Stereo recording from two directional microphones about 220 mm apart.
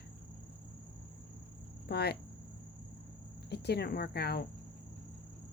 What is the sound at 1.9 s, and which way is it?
Cricket, 45° left (ahead or behind).